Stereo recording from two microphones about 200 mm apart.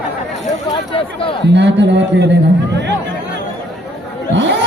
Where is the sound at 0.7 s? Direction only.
25° left (ahead or behind).